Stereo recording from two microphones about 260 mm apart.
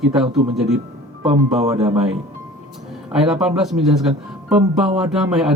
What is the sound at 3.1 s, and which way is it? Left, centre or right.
Speech, centre.